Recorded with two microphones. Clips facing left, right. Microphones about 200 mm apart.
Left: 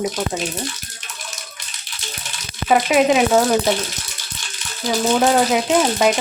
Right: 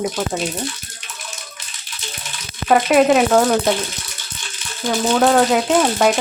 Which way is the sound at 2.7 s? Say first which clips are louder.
Right 2 dB; centre (ahead or behind).